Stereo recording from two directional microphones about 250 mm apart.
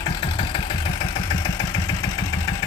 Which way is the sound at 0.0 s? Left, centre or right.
Centre.